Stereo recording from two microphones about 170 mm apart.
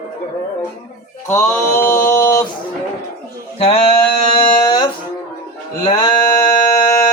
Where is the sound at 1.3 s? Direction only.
15° left (ahead or behind).